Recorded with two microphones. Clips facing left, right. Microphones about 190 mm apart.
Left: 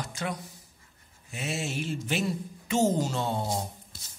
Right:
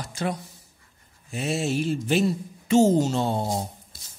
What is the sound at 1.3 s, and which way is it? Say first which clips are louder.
Speech: right 7 dB; 35° right (ahead or behind).